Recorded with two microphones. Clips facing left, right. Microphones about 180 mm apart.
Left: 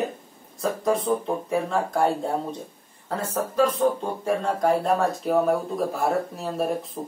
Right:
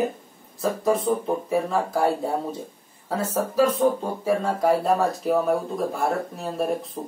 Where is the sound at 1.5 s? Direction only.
5° right (ahead or behind).